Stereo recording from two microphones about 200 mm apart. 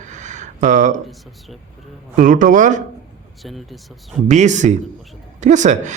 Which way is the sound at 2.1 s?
40° right (ahead or behind).